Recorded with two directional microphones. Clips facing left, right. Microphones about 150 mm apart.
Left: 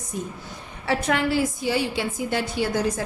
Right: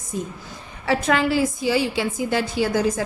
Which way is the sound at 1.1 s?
90° right.